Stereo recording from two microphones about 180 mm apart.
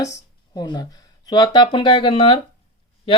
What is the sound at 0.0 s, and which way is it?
Speech, 20° left (ahead or behind).